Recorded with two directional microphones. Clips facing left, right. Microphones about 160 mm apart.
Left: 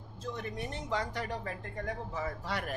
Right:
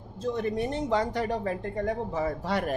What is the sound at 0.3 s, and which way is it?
Speech, 30° right (ahead or behind).